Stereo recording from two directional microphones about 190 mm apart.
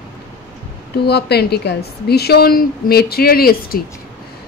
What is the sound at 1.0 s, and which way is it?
Speech, 60° left (ahead or behind).